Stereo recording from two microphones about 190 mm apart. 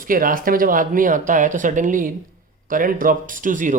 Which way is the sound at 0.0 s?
45° right (ahead or behind).